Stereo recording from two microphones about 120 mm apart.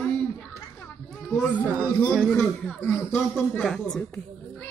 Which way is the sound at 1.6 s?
15° right (ahead or behind).